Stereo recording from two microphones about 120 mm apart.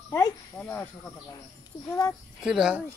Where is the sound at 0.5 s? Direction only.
15° left (ahead or behind).